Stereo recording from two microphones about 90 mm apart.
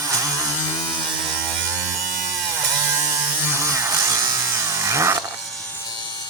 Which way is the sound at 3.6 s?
35° right (ahead or behind).